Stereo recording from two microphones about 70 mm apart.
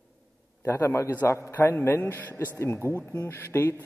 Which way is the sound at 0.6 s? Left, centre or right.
Left.